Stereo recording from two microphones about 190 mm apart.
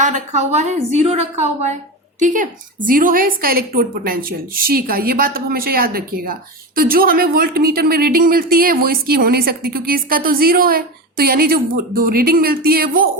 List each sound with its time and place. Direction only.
0.0 s a woman's voice: 40° right (ahead or behind)